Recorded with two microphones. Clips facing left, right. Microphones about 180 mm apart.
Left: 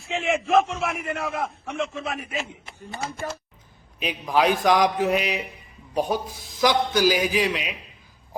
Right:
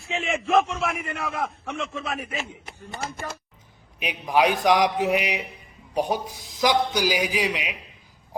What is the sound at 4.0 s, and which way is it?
A man's voice, 15° right (ahead or behind).